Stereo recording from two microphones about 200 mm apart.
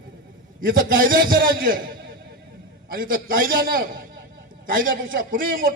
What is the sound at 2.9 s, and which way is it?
A man's voice, 45° right (ahead or behind).